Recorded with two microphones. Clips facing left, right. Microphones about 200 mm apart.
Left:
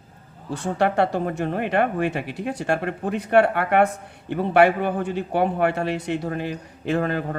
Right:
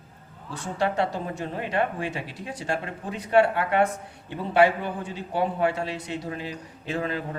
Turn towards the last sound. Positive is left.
turn(degrees=55)  # may be behind; listen again after turning